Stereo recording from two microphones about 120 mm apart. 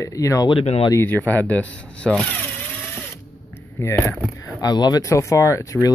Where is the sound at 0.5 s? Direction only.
50° left (ahead or behind).